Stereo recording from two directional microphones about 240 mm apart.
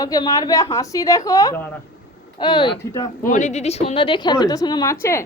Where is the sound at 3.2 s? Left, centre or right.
Left.